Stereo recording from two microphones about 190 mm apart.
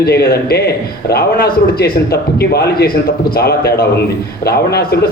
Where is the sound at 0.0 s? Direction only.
55° left (ahead or behind).